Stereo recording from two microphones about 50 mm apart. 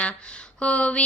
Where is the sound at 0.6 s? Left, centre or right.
Left.